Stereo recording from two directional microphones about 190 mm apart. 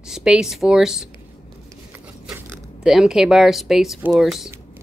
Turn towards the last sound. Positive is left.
turn(degrees=0)  # may be behind; listen again after turning